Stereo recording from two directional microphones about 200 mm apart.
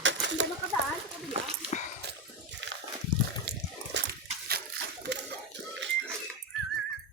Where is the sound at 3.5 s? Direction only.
55° right (ahead or behind).